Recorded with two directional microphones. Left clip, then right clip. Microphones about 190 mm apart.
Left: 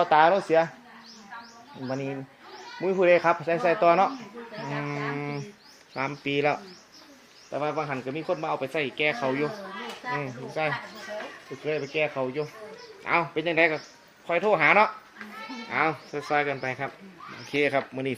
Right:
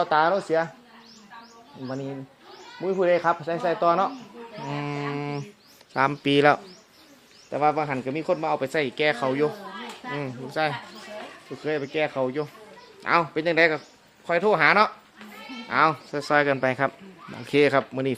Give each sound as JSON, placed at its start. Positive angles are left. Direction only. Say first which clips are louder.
{"t": 0.0, "sound": "speech", "louder": "left 2 dB", "side_deg": -15}
{"t": 1.8, "sound": "speech", "louder": "left 1 dB", "side_deg": -10}
{"t": 4.6, "sound": "livestock", "louder": "right 1 dB", "side_deg": -20}
{"t": 5.9, "sound": "a man's voice", "louder": "right 7 dB", "side_deg": -40}